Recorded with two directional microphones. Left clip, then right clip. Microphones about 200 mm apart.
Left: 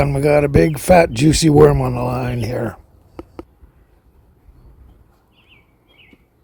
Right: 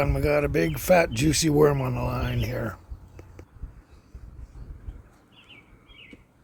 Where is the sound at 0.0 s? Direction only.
45° left (ahead or behind).